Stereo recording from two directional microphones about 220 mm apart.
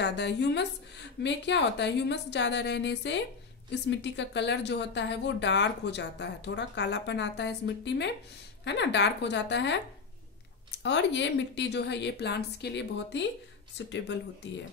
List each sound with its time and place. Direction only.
0.0 s speech: 50° left (ahead or behind)
10.8 s speech: 55° left (ahead or behind)